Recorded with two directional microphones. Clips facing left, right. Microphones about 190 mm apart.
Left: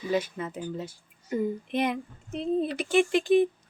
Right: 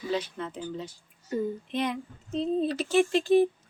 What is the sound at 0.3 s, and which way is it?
Speech, 10° left (ahead or behind).